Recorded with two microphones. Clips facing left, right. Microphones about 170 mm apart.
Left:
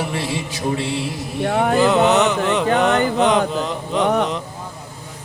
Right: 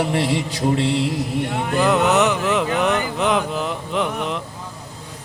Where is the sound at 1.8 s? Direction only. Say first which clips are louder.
Even; centre (ahead or behind).